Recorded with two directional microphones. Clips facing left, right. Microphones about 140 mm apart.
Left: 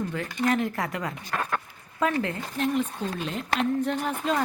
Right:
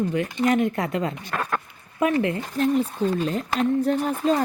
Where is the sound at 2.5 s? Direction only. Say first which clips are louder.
Right 4 dB; 40° right (ahead or behind).